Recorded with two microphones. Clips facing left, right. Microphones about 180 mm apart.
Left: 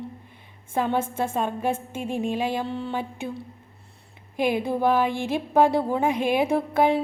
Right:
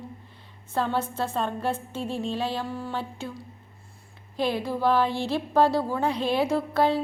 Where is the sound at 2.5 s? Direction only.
25° left (ahead or behind).